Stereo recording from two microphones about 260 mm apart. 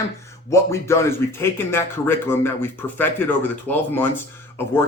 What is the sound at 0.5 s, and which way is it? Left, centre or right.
A man's voice, centre.